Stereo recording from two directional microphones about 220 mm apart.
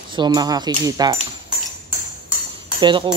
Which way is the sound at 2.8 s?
20° right (ahead or behind).